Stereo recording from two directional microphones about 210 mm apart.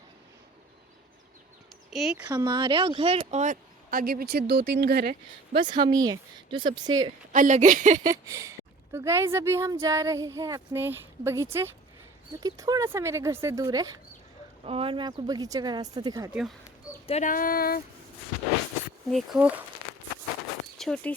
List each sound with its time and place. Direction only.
1.9 s speech: centre (ahead or behind)
2.2 s speech: 20° right (ahead or behind); by 5.1 s 50° right (ahead or behind)
5.5 s speech: 20° right (ahead or behind)
7.3 s speech: 35° right (ahead or behind)
8.0 s speech: 15° right (ahead or behind)
14.6 s speech: 25° right (ahead or behind)
16.3 s speech: centre (ahead or behind)
17.1 s speech: 35° left (ahead or behind)
19.1 s speech: 5° right (ahead or behind)
20.7 s speech: centre (ahead or behind)